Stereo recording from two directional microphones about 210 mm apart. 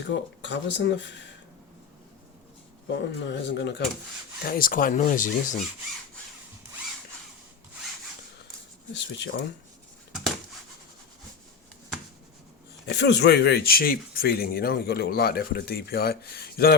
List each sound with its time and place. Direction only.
0.1 s speech: 55° left (ahead or behind)
2.8 s speech: 60° left (ahead or behind)
4.4 s speech: 45° left (ahead or behind)
8.9 s speech: 55° left (ahead or behind)
12.8 s speech: 55° left (ahead or behind)